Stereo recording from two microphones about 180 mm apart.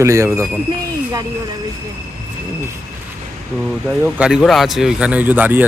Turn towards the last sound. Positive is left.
turn(degrees=-10)  # may be behind; listen again after turning